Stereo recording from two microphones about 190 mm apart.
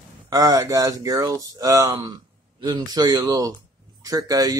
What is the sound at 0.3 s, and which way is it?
Speech, 20° right (ahead or behind).